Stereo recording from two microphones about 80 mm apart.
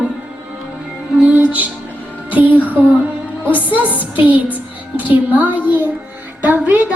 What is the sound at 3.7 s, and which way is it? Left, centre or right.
Music, right.